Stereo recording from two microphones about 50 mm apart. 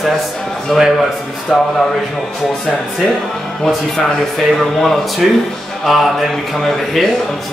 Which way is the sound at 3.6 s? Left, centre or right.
Centre.